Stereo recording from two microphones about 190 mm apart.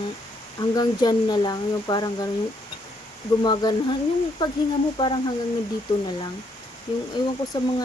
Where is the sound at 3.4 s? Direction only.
25° left (ahead or behind).